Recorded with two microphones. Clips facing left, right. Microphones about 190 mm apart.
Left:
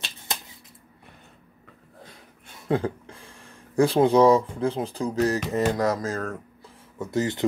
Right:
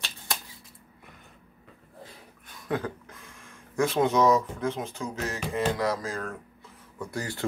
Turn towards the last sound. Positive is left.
turn(degrees=20)  # may be behind; listen again after turning